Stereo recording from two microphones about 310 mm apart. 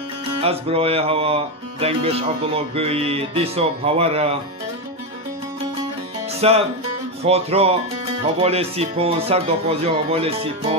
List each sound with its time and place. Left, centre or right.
0.4 s speech: centre
6.4 s speech: centre